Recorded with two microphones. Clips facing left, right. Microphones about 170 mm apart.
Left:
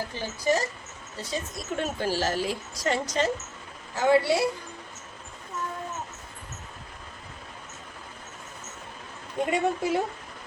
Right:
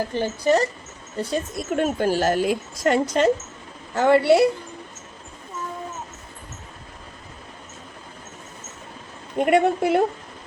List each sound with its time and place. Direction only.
0.1 s a woman's voice: 60° right (ahead or behind)
9.4 s a woman's voice: 70° right (ahead or behind)